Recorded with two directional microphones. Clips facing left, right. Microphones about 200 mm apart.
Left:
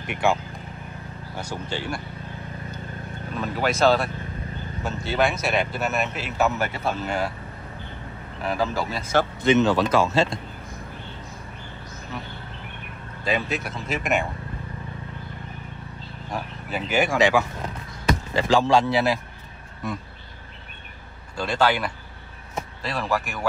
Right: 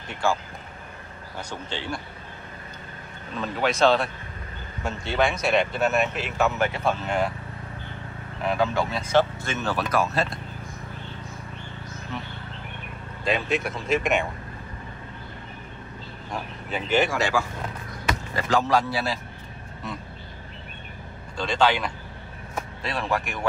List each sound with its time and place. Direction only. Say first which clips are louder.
0.0 s speech: left 3 dB; 20° left (ahead or behind)
1.4 s speech: left 3 dB; 10° left (ahead or behind)
3.3 s speech: even; 5° left (ahead or behind)
8.5 s speech: right 1 dB; centre (ahead or behind)
9.4 s speech: left 9 dB; 20° left (ahead or behind)
9.9 s speech: left 1 dB; 90° left
13.2 s speech: right 1 dB; 5° left (ahead or behind)
16.7 s speech: left 1 dB; 10° left (ahead or behind)
18.7 s speech: left 4 dB; 25° left (ahead or behind)
21.4 s speech: even; 5° left (ahead or behind)